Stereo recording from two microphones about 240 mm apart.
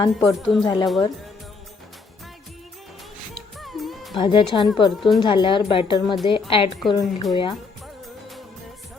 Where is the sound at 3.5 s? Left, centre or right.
Centre.